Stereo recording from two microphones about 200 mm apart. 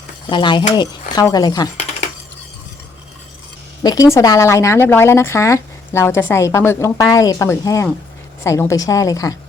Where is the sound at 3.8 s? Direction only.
15° left (ahead or behind).